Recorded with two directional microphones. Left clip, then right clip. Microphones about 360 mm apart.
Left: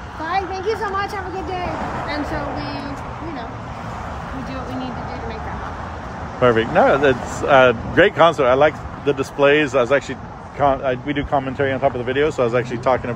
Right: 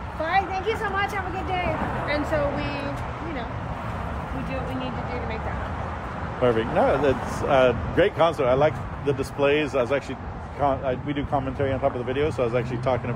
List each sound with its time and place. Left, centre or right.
0.3 s speech: centre
6.4 s speech: left